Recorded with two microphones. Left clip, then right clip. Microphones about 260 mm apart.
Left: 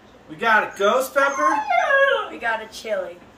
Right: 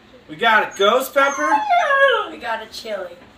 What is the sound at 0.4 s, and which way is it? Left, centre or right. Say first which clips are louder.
Speech: right 3 dB; centre.